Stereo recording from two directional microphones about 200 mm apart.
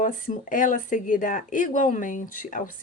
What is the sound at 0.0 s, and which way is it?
A woman's voice, 40° left (ahead or behind).